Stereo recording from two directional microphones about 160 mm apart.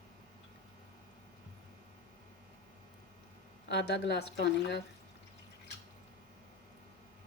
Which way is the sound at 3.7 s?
90° left.